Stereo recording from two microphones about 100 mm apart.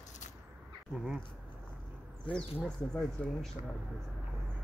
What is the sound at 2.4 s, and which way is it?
Speech, 10° left (ahead or behind).